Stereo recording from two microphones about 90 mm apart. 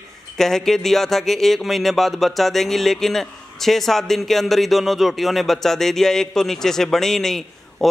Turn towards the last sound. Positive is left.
turn(degrees=5)  # may be behind; listen again after turning